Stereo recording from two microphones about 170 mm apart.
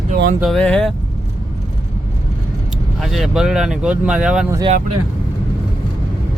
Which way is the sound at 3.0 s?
Centre (ahead or behind).